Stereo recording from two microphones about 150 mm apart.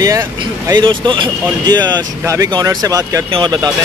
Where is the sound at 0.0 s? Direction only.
20° right (ahead or behind).